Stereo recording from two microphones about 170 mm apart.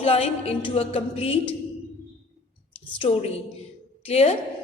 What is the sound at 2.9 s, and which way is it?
A woman's voice, 35° left (ahead or behind).